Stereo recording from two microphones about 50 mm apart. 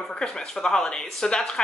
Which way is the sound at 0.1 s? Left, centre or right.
Centre.